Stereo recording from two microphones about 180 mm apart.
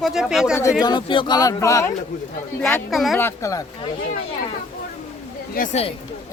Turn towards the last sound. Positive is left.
turn(degrees=55)  # may be behind; listen again after turning